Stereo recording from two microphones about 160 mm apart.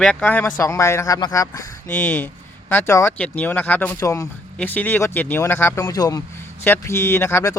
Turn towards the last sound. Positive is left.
turn(degrees=15)  # may be behind; listen again after turning